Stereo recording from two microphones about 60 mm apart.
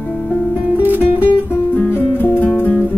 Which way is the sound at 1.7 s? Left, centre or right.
Left.